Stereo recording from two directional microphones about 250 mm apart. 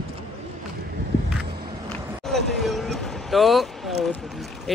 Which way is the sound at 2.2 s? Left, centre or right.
Centre.